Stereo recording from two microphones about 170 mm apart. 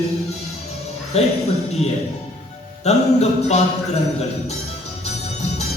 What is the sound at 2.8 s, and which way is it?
Music, 40° left (ahead or behind).